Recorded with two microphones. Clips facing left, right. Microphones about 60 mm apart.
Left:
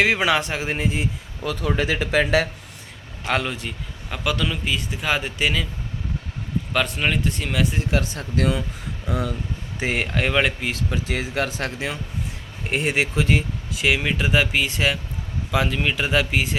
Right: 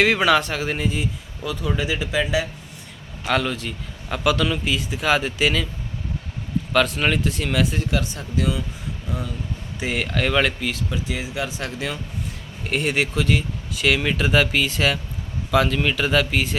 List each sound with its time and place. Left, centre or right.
0.0 s speech: centre
1.5 s speech: left
3.2 s a man's voice: centre
4.2 s a man's voice: centre
6.7 s a man's voice: centre
7.9 s speech: left
9.0 s speech: left
9.8 s speech: left
10.7 s speech: left
12.6 s speech: centre
13.8 s speech: centre